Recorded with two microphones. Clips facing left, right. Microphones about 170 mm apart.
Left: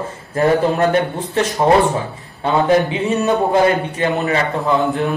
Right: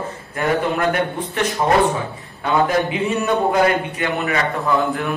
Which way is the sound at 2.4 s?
25° left (ahead or behind).